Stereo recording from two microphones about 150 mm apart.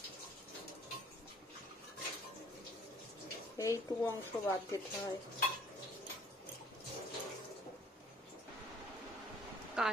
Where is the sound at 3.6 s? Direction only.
20° left (ahead or behind).